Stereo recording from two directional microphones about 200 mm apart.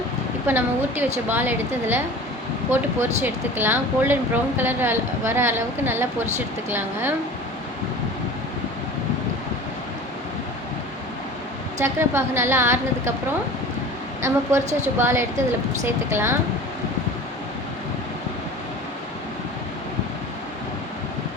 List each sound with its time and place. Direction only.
0.4 s speech: 10° right (ahead or behind)
11.8 s speech: 10° right (ahead or behind)
14.2 s a woman's voice: 15° right (ahead or behind)
14.6 s a woman's voice: 35° right (ahead or behind)
14.9 s speech: 10° right (ahead or behind)